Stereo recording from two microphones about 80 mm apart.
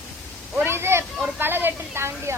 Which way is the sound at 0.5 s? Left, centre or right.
Right.